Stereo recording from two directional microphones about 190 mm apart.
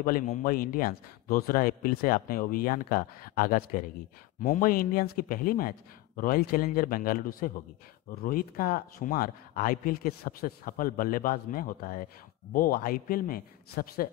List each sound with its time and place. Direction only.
0.0 s speech: 45° left (ahead or behind)